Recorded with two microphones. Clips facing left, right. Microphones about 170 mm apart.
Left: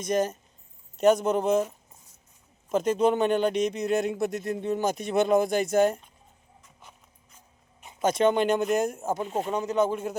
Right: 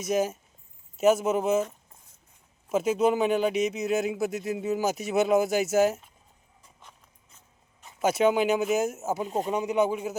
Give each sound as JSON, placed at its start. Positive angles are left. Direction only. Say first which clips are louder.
{"t": 0.0, "sound": "speech", "louder": "even", "side_deg": -5}
{"t": 2.6, "sound": "speech", "louder": "left 1 dB", "side_deg": -5}
{"t": 7.3, "sound": "mechanisms", "louder": "left 4 dB", "side_deg": 20}
{"t": 8.0, "sound": "speech", "louder": "even", "side_deg": -5}